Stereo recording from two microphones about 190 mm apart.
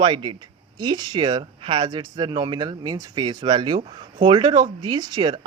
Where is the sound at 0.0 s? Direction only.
25° right (ahead or behind).